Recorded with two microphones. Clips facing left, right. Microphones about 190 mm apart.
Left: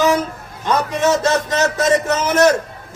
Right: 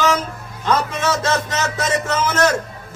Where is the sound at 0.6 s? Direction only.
15° left (ahead or behind).